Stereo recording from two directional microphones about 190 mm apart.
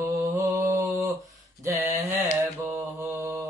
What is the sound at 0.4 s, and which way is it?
Mantra, 15° right (ahead or behind).